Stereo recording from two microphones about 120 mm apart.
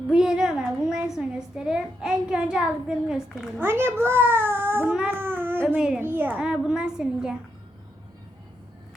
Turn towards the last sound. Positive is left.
turn(degrees=-5)  # may be behind; listen again after turning